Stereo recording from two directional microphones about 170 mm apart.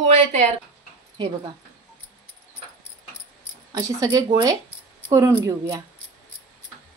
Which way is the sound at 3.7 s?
20° right (ahead or behind).